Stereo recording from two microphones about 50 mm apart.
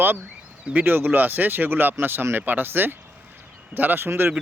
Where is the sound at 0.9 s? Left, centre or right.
Right.